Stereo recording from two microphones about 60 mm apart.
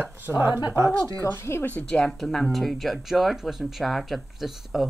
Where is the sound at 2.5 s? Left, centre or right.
Centre.